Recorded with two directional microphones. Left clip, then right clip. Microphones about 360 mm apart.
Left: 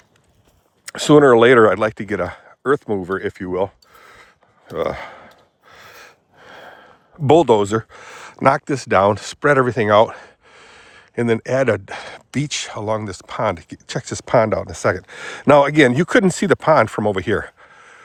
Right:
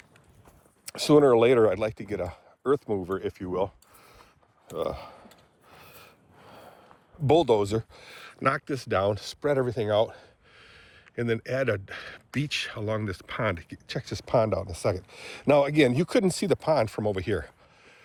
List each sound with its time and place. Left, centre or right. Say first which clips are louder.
0.9 s speech: left 8 dB; left
5.6 s gasp: left 10 dB; left
7.3 s speech: left 9 dB; left